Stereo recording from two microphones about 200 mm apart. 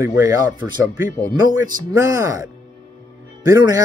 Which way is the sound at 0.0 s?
15° right (ahead or behind).